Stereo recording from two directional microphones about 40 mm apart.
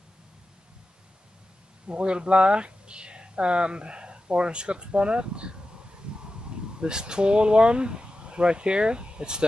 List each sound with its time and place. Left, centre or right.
1.9 s speech: right
6.8 s speech: right